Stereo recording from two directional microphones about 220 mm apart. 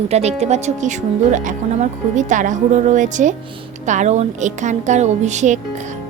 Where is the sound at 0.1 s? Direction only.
30° right (ahead or behind).